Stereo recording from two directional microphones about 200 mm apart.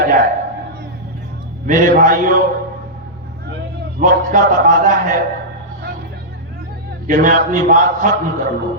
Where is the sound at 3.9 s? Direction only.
45° right (ahead or behind).